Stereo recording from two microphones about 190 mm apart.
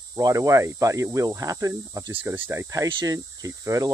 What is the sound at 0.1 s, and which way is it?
Speech, 15° right (ahead or behind).